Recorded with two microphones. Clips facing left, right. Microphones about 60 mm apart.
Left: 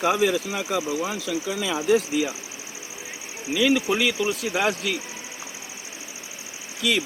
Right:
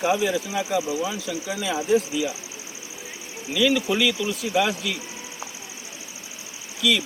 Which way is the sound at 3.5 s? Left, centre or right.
Left.